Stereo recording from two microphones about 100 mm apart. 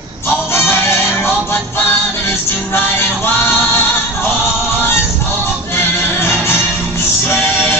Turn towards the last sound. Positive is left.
turn(degrees=25)  # may be behind; listen again after turning